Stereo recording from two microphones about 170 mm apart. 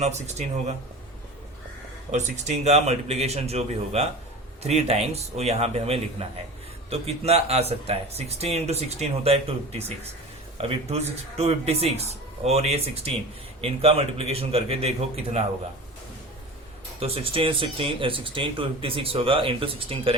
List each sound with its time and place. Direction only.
0.0 s speech: 40° right (ahead or behind)
2.0 s speech: 45° right (ahead or behind)
17.0 s speech: 35° right (ahead or behind)